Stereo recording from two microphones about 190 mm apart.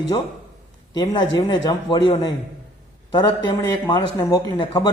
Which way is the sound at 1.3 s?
20° left (ahead or behind).